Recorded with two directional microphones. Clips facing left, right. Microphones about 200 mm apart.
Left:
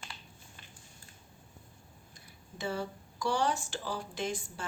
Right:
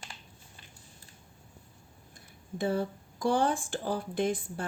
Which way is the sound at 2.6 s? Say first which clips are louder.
Right 6 dB; 55° right (ahead or behind).